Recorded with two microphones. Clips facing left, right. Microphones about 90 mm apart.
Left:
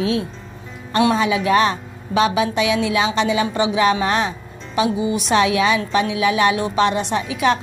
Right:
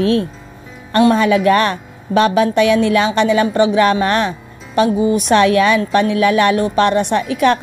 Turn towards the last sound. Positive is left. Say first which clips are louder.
# right 4 dB
turn(degrees=-55)  # may be behind; listen again after turning